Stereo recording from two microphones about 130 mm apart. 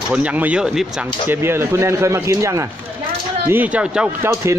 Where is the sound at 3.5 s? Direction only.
10° right (ahead or behind).